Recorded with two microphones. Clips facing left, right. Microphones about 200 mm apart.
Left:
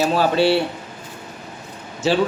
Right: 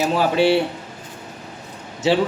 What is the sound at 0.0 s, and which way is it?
Speech, 15° right (ahead or behind).